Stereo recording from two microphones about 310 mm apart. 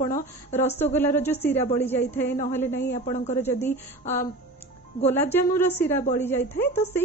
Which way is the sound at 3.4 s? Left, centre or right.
Centre.